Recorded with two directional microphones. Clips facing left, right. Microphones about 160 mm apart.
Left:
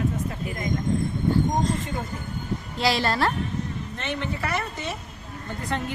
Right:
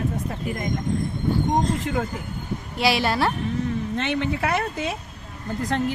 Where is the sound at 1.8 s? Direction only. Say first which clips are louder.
Right 6 dB; 80° right.